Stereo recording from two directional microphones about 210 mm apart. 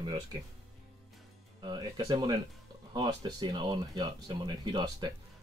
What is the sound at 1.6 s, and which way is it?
Speech, 20° right (ahead or behind).